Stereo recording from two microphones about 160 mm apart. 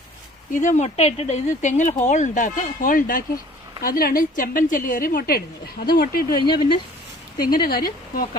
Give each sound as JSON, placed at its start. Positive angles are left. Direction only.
{"t": 0.5, "sound": "a woman's voice", "side_deg": 50}
{"t": 6.4, "sound": "speech", "side_deg": 30}
{"t": 7.3, "sound": "a woman's voice", "side_deg": 65}